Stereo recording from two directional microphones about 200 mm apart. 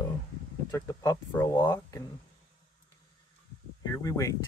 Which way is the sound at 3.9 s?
15° left (ahead or behind).